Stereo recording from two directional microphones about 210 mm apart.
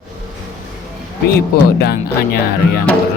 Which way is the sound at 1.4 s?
50° left (ahead or behind).